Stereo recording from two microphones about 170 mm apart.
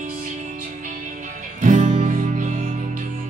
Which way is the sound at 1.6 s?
45° right (ahead or behind).